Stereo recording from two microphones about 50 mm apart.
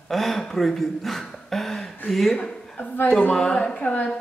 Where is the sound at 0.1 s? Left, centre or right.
Centre.